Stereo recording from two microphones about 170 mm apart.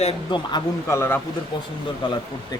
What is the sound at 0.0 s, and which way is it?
Speech, 30° left (ahead or behind).